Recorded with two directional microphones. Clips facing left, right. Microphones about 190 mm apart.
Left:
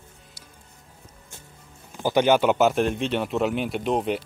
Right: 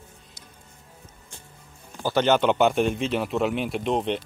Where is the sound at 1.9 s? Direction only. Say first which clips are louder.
Left 2 dB; 10° left (ahead or behind).